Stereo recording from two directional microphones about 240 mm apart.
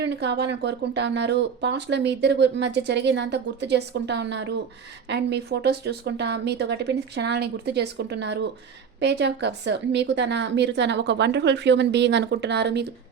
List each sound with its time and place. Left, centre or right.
0.0 s speech: right